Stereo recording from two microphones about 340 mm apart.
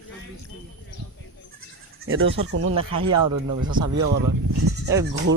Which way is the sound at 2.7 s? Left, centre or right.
Centre.